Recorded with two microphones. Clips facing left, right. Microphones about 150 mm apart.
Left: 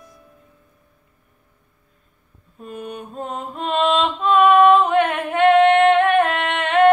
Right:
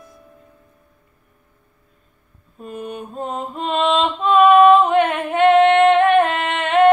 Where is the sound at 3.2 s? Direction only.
30° right (ahead or behind).